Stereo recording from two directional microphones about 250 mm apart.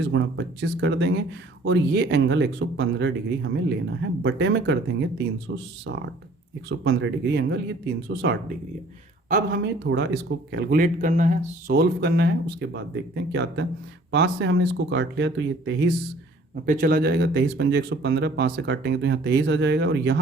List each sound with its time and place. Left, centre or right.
0.1 s speech: right
16.6 s speech: right